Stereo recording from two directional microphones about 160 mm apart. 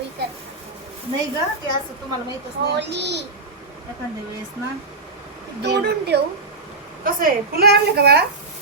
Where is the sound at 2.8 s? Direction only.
90° right.